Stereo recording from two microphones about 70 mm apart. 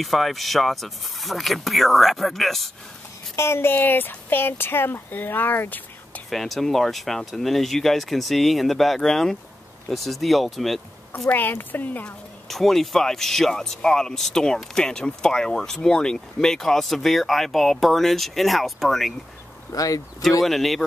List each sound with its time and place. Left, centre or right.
0.0 s speech: centre
3.3 s speech: left
6.3 s speech: centre
11.2 s speech: left
12.4 s speech: centre
19.7 s speech: left
20.4 s speech: centre